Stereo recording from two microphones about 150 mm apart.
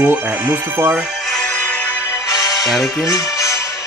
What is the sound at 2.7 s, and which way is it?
Speech, centre (ahead or behind).